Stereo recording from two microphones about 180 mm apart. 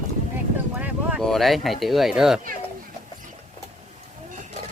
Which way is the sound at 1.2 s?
Centre (ahead or behind).